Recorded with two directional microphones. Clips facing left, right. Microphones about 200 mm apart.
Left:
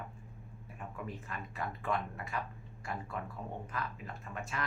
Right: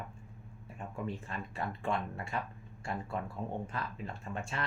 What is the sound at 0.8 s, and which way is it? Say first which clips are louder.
Speech: right 4 dB; 30° right (ahead or behind).